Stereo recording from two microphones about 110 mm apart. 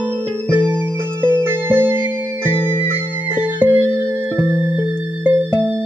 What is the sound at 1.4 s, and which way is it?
Music, 20° right (ahead or behind).